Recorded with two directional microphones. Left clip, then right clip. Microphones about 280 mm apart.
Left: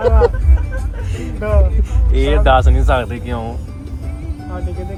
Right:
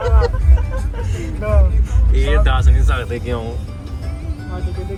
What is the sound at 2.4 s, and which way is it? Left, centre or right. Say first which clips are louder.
Speech: left 10 dB; centre.